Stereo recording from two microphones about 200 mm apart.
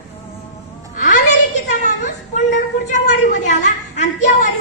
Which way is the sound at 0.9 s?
40° left (ahead or behind).